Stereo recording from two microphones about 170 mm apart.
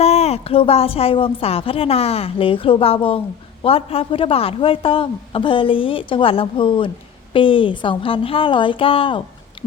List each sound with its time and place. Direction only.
0.0 s a man's voice: 40° left (ahead or behind)